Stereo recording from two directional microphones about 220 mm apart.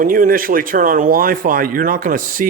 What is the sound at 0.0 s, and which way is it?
Speech, 40° right (ahead or behind).